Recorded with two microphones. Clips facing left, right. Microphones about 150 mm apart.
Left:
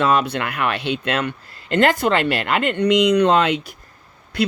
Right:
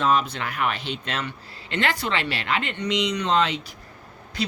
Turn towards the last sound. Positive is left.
turn(degrees=60)  # may be behind; listen again after turning